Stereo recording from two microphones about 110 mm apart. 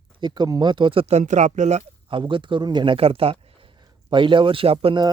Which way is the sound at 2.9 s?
60° right (ahead or behind).